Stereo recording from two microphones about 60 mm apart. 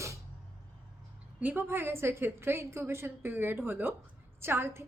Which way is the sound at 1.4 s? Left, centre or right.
Right.